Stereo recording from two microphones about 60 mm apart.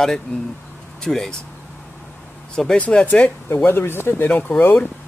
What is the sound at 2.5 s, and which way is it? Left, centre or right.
Speech, centre.